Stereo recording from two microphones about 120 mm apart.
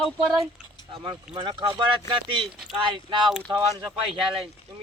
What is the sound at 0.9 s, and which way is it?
Speech, 40° right (ahead or behind).